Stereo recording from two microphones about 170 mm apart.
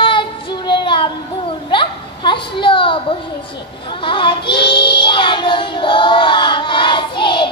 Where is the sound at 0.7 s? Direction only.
30° left (ahead or behind).